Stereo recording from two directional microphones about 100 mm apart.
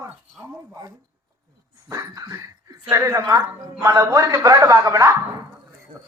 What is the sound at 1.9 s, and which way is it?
A man's voice, 35° right (ahead or behind).